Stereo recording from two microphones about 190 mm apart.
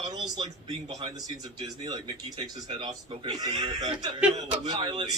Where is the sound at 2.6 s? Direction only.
25° right (ahead or behind).